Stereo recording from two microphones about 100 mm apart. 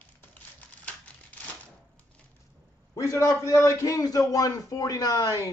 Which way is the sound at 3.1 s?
30° left (ahead or behind).